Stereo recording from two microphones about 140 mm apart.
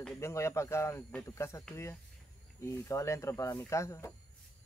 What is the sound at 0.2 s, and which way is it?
Speech, 20° left (ahead or behind).